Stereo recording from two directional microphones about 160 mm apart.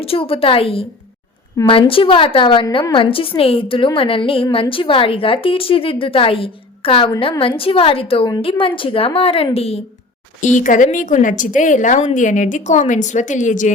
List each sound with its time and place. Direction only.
0.0 s a woman's voice: 35° left (ahead or behind)
10.4 s a woman's voice: 50° left (ahead or behind)